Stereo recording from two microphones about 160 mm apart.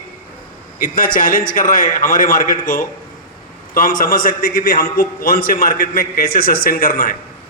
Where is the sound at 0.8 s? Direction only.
60° left (ahead or behind).